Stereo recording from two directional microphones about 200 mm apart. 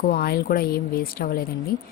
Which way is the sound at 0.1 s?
50° left (ahead or behind).